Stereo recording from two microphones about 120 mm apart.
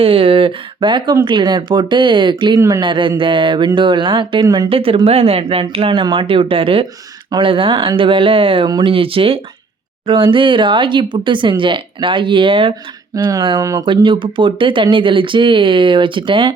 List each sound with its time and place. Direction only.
0.0 s speech: 50° right (ahead or behind)
2.6 s speech: 25° right (ahead or behind)
2.8 s speech: 40° right (ahead or behind)
13.1 s speech: 30° right (ahead or behind)
13.8 s speech: 45° right (ahead or behind)